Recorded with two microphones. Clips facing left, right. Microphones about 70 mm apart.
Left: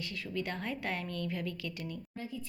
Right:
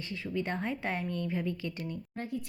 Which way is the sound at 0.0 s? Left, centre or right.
Right.